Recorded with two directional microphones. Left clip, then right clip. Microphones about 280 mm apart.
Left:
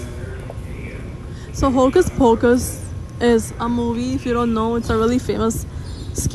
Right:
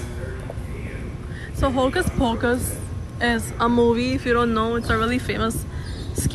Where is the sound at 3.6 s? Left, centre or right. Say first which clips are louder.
Right 4 dB; centre.